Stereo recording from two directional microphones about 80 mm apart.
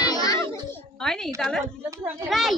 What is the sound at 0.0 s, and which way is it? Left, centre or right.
Music, left.